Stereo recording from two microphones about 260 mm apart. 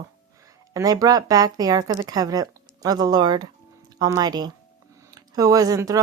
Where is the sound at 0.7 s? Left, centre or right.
Centre.